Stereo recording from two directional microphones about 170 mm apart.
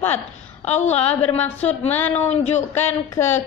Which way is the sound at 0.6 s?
40° left (ahead or behind).